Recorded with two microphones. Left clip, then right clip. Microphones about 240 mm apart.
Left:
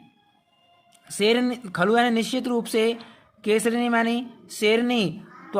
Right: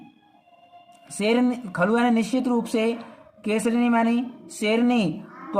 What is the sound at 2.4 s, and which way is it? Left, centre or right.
Speech, left.